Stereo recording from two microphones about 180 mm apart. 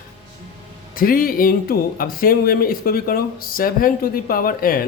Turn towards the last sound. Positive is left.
turn(degrees=50)  # may be behind; listen again after turning